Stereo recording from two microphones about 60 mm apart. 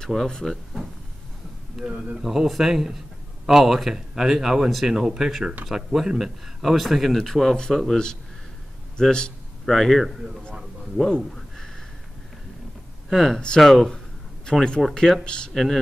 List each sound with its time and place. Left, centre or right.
0.0 s speech: centre
1.8 s speech: centre
2.1 s a man's voice: centre
11.3 s a sound: centre
13.1 s speech: centre
15.5 s speech: centre